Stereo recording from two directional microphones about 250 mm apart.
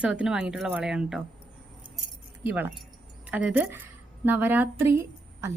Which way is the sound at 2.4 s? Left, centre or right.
Centre.